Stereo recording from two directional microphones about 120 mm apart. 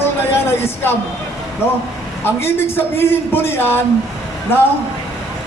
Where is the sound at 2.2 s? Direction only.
20° left (ahead or behind).